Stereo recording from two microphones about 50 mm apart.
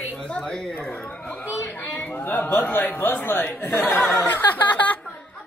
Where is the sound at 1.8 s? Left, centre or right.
Left.